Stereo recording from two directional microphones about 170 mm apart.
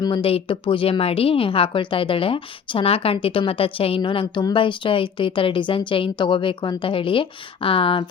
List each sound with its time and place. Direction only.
0.0 s a woman's voice: 30° left (ahead or behind)